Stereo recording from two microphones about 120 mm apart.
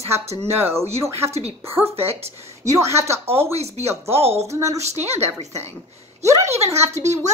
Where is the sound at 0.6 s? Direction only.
20° right (ahead or behind).